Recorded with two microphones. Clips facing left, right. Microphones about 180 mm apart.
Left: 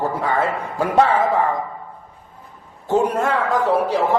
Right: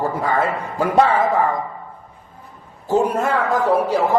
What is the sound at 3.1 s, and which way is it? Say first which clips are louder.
Speech: even; 10° right (ahead or behind).